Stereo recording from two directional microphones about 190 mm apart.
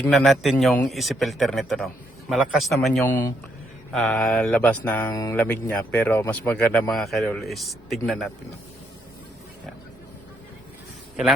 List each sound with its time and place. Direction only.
0.0 s speech: centre (ahead or behind)
3.0 s speech: 10° left (ahead or behind)